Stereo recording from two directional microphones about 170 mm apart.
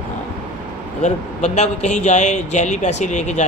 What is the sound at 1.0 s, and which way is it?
A man's voice, 45° left (ahead or behind).